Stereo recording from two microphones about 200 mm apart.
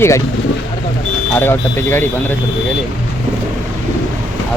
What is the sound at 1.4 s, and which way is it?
Speech, 10° left (ahead or behind).